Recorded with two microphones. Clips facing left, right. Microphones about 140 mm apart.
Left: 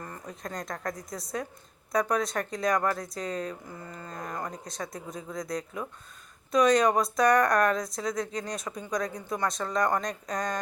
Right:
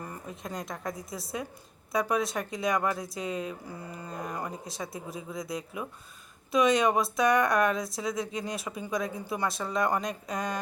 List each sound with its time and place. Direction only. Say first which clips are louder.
0.0 s speech: even; 10° right (ahead or behind)